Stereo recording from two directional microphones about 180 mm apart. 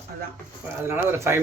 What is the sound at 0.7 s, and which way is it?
Speech, 15° right (ahead or behind).